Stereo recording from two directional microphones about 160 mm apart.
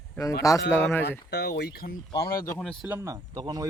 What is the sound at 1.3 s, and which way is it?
Speech, 90° left.